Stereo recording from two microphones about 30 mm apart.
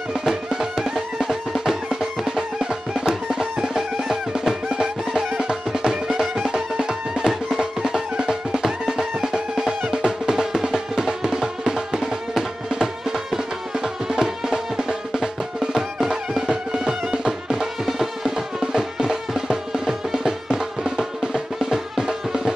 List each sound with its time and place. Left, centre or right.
0.2 s music: right
17.8 s music: centre
18.6 s music: right